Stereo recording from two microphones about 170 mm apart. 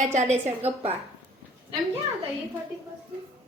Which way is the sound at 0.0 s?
45° right (ahead or behind).